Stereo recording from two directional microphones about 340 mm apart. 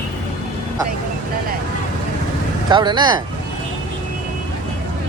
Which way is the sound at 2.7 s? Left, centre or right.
Centre.